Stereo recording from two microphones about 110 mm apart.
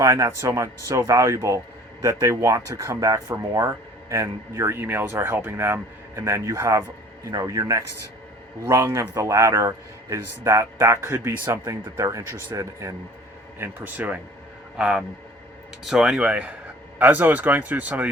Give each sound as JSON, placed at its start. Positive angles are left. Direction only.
{"t": 0.0, "sound": "speech", "side_deg": -30}
{"t": 13.6, "sound": "speech", "side_deg": -15}